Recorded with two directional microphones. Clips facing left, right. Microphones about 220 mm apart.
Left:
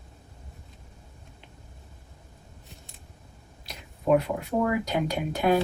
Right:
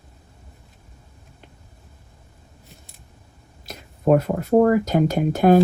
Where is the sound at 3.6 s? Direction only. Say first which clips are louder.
Right 6 dB; 45° right (ahead or behind).